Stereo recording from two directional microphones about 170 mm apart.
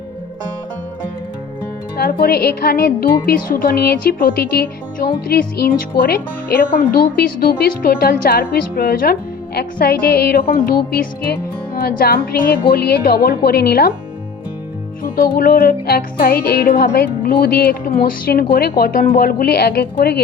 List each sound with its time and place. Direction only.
2.2 s music: 65° left (ahead or behind)
15.0 s music: 65° left (ahead or behind)